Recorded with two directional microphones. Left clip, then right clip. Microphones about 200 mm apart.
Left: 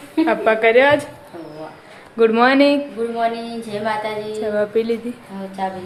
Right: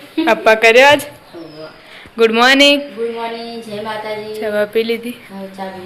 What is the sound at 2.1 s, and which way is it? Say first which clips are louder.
Speech: right 3 dB; centre (ahead or behind).